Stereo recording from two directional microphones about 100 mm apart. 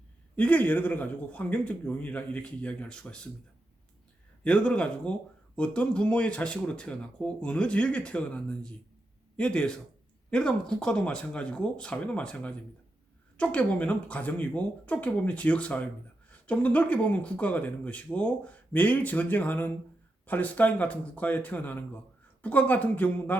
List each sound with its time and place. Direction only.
0.3 s speech: 15° left (ahead or behind)
4.4 s speech: 10° left (ahead or behind)